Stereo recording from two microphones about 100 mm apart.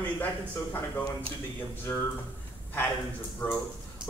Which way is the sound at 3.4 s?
20° left (ahead or behind).